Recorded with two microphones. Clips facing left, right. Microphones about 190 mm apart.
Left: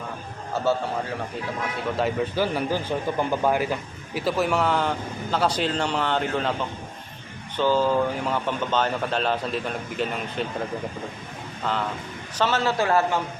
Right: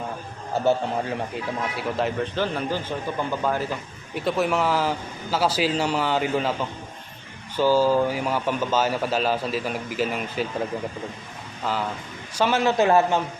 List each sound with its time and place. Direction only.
0.5 s a man's voice: 15° right (ahead or behind)
1.7 s speech: centre (ahead or behind)
4.1 s speech: centre (ahead or behind)
7.5 s speech: 5° right (ahead or behind)
11.6 s a man's voice: 5° right (ahead or behind)